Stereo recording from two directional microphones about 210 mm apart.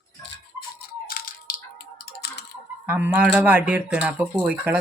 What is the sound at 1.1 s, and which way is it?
Crushing, 45° left (ahead or behind).